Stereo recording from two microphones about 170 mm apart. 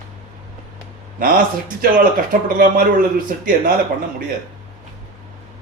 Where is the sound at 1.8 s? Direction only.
55° right (ahead or behind).